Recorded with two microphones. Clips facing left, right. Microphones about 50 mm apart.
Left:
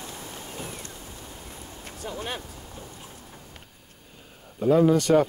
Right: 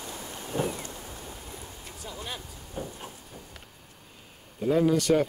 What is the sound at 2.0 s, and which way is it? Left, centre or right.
Vehicle, left.